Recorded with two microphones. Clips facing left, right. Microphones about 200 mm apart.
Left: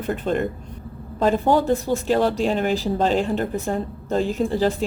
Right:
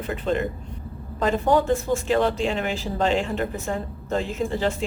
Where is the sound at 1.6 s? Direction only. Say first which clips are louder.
Left 2 dB; 35° left (ahead or behind).